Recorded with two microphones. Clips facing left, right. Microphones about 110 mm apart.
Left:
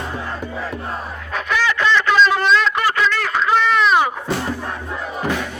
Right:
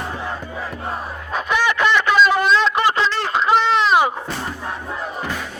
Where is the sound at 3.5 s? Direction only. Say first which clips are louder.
Even; 25° right (ahead or behind).